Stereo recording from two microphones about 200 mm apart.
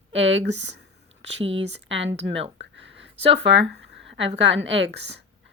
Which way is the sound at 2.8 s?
65° right (ahead or behind).